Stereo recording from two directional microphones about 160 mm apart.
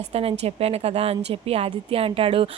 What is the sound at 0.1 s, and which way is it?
Speech, 40° right (ahead or behind).